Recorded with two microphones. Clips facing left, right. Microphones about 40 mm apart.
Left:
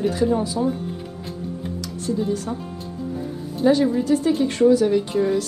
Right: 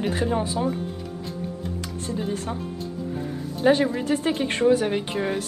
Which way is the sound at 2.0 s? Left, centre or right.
Right.